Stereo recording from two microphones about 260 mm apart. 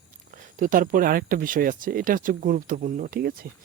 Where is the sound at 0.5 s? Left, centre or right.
Right.